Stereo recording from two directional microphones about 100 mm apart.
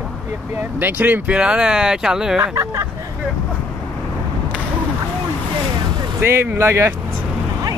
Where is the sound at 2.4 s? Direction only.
30° right (ahead or behind).